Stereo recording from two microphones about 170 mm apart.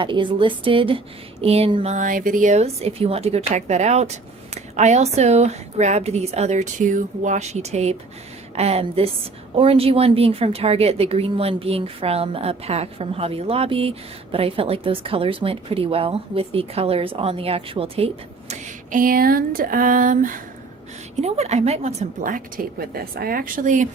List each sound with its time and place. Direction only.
0.0 s speech: 30° right (ahead or behind); by 20.4 s 50° right (ahead or behind)
21.2 s speech: 40° right (ahead or behind)
22.2 s a woman's voice: 55° right (ahead or behind)